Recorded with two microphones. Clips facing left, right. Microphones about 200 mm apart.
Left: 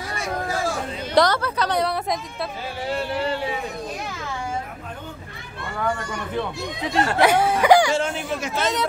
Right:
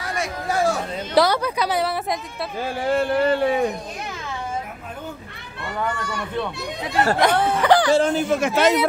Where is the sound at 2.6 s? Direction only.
50° right (ahead or behind).